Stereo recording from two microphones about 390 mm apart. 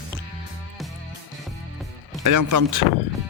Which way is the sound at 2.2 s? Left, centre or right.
Right.